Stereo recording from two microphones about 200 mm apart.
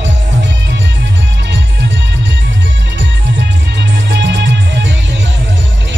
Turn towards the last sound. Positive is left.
turn(degrees=-60)  # may be behind; listen again after turning